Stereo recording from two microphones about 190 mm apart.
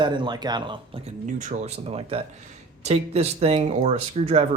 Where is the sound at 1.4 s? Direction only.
35° right (ahead or behind).